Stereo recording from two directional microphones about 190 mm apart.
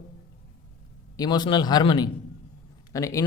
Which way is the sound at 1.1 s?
20° left (ahead or behind).